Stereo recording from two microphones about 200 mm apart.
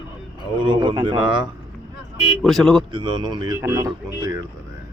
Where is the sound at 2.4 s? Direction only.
Centre (ahead or behind).